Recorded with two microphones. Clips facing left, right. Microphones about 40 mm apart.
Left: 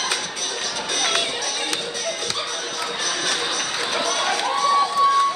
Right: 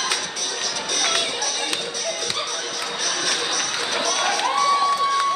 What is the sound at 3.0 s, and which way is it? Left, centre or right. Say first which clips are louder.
Music: even; centre.